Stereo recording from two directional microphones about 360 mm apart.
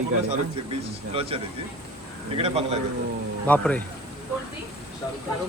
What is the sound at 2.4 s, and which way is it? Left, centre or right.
Speech, centre.